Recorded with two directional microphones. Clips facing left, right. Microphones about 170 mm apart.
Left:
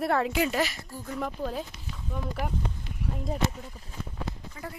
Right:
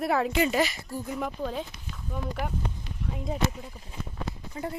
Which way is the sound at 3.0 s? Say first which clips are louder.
Left 1 dB; 10° left (ahead or behind).